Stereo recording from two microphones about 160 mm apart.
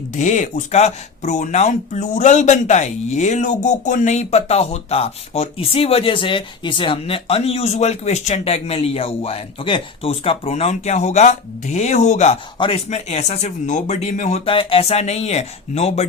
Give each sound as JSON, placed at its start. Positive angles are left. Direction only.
{"t": 0.2, "sound": "speech", "side_deg": 50}